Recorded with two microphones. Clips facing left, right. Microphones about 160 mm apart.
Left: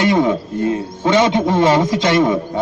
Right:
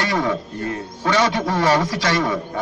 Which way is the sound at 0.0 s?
20° left (ahead or behind).